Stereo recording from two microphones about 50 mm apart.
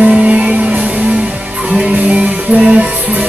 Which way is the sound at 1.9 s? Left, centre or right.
Right.